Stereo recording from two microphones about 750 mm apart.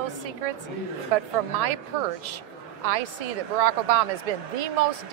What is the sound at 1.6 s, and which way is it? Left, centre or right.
A woman's voice, right.